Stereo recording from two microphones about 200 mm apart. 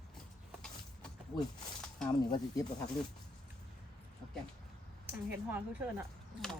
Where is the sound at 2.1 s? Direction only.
20° left (ahead or behind).